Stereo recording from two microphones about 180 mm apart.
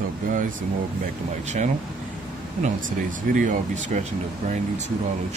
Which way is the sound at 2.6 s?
45° right (ahead or behind).